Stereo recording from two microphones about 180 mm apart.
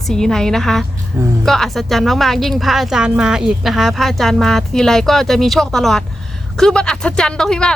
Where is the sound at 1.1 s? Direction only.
15° right (ahead or behind).